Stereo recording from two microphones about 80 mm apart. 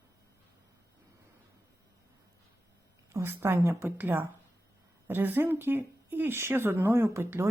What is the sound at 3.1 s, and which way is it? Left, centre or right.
A woman's voice, right.